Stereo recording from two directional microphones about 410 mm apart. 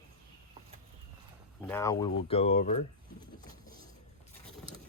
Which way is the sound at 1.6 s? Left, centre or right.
Centre.